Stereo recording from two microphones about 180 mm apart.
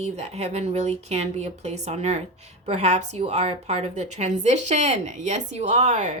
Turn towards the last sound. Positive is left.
turn(degrees=-40)  # may be behind; listen again after turning